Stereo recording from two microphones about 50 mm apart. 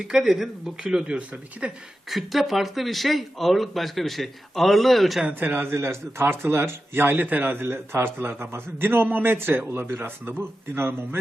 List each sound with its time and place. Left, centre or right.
0.0 s speech: centre
1.1 s speech: right
2.0 s speech: centre
5.3 s speech: right